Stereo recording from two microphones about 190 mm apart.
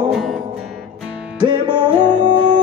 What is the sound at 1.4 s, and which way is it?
Music, 25° right (ahead or behind).